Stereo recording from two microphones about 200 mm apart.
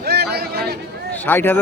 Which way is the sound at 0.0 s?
55° right (ahead or behind).